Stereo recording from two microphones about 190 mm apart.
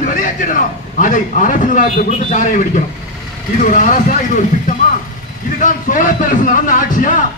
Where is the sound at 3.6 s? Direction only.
40° left (ahead or behind).